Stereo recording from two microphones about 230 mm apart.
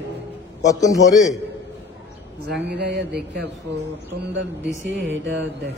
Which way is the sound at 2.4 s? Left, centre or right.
Right.